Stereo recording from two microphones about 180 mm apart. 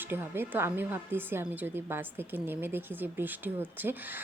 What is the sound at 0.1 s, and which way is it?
A woman's voice, 10° right (ahead or behind).